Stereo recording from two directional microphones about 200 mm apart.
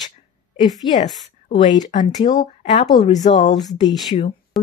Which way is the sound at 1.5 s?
20° left (ahead or behind).